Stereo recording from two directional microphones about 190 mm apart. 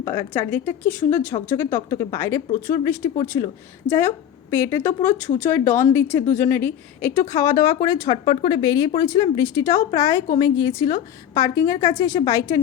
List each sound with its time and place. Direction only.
0.0 s speech: 15° left (ahead or behind)